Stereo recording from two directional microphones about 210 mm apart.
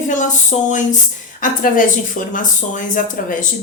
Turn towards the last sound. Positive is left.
turn(degrees=40)  # may be behind; listen again after turning